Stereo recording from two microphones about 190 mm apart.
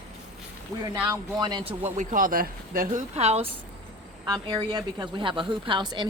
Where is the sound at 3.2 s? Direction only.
35° right (ahead or behind).